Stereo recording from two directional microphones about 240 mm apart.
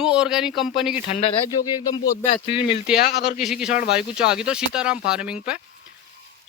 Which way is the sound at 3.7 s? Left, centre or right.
Left.